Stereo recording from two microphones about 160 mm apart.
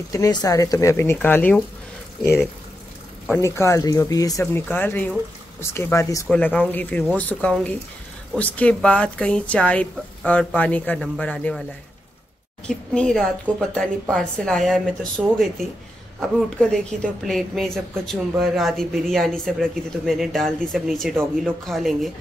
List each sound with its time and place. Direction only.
0.1 s speech: 20° left (ahead or behind)
3.3 s speech: 20° left (ahead or behind)
12.6 s a woman's voice: 5° left (ahead or behind)